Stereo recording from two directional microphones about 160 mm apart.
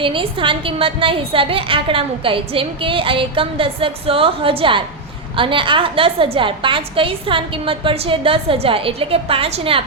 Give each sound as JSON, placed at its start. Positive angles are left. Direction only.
{"t": 0.0, "sound": "a woman's voice", "side_deg": -35}